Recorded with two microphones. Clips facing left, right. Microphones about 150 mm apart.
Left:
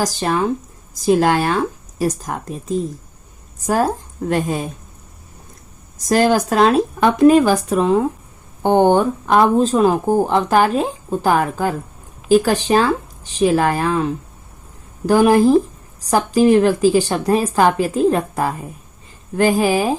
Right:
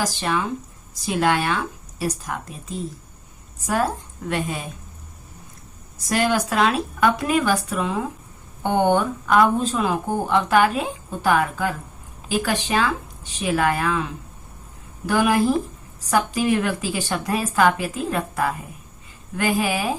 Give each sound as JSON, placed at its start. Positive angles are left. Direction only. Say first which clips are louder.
{"t": 0.0, "sound": "speech", "louder": "left 5 dB", "side_deg": 40}
{"t": 6.1, "sound": "speech", "louder": "left 6 dB", "side_deg": 40}